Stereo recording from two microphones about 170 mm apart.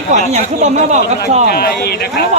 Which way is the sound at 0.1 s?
45° right (ahead or behind).